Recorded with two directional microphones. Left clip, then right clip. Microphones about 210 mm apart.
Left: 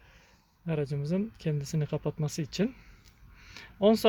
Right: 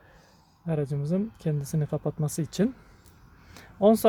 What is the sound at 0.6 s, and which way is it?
Speech, 10° right (ahead or behind).